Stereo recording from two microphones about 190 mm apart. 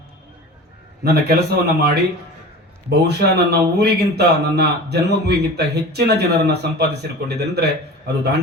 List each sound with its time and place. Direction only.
1.0 s speech: 55° right (ahead or behind)
2.9 s speech: 60° right (ahead or behind)